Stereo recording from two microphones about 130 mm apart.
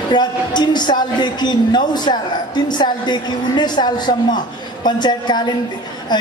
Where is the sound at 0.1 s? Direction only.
35° left (ahead or behind).